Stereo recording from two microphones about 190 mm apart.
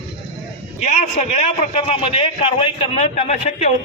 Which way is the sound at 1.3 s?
35° left (ahead or behind).